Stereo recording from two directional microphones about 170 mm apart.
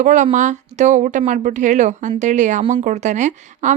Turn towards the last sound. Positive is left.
turn(degrees=-45)  # may be behind; listen again after turning